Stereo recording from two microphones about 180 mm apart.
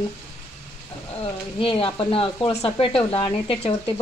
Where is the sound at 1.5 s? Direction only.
30° left (ahead or behind).